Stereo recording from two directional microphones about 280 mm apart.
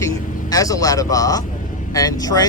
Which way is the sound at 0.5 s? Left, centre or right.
Centre.